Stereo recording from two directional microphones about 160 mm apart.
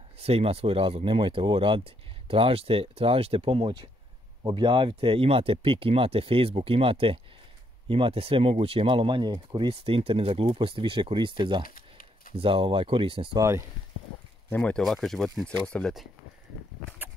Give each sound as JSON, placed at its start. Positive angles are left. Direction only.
{"t": 0.2, "sound": "speech", "side_deg": -40}
{"t": 11.6, "sound": "a sound", "side_deg": 60}
{"t": 12.4, "sound": "speech", "side_deg": -35}
{"t": 13.4, "sound": "speech", "side_deg": -20}
{"t": 14.5, "sound": "speech", "side_deg": 5}
{"t": 17.0, "sound": "horse", "side_deg": -10}